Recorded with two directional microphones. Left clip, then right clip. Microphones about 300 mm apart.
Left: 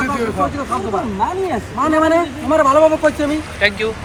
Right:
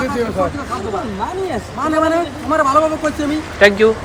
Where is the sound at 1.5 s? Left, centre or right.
Left.